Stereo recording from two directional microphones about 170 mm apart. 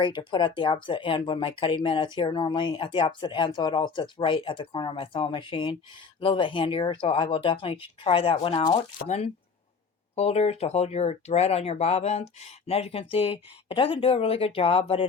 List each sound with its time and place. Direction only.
0.0 s speech: 30° left (ahead or behind)